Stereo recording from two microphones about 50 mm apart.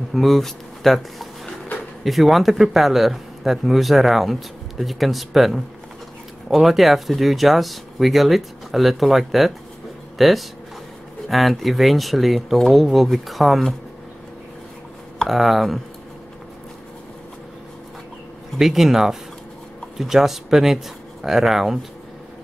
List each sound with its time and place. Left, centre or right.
0.1 s speech: centre
15.1 s speech: centre
18.6 s speech: centre